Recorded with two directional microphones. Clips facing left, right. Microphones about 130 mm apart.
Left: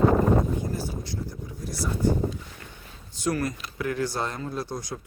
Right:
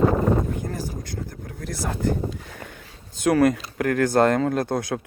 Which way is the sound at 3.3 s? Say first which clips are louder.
Right 11 dB; 70° right (ahead or behind).